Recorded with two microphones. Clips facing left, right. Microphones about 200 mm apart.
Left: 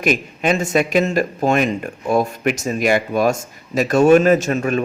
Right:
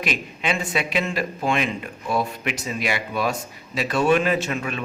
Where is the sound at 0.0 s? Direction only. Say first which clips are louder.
Left 8 dB; 45° left (ahead or behind).